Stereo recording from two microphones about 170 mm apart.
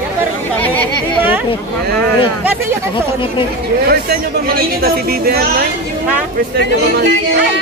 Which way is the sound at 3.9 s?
65° right (ahead or behind).